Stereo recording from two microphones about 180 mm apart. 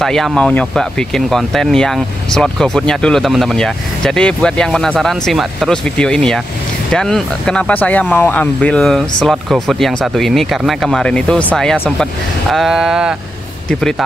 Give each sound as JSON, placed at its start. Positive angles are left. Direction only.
{"t": 0.0, "sound": "speech", "side_deg": 0}